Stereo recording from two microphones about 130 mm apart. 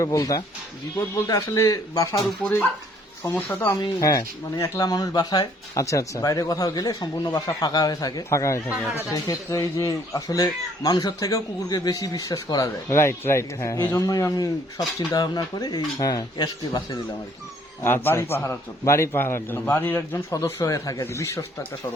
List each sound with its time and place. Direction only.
0.0 s speech: 25° left (ahead or behind)
2.4 s speech: 15° left (ahead or behind)
3.8 s speech: 25° left (ahead or behind)
17.8 s speech: 15° left (ahead or behind)